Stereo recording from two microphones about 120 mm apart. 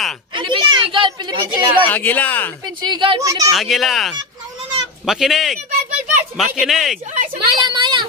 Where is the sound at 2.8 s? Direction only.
40° right (ahead or behind).